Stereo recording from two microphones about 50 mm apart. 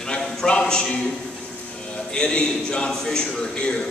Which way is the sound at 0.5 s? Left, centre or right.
Centre.